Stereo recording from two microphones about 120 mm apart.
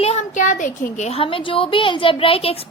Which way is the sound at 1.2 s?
45° left (ahead or behind).